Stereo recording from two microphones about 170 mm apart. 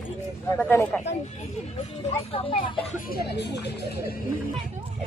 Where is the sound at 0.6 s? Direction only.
10° left (ahead or behind).